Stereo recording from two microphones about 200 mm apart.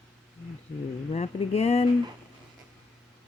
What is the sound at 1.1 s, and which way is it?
Speech, 30° left (ahead or behind).